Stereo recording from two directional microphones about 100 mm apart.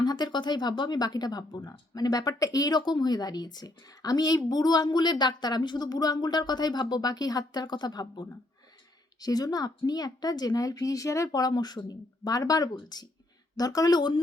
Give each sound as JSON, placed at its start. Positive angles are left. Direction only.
{"t": 0.0, "sound": "a woman's voice", "side_deg": 45}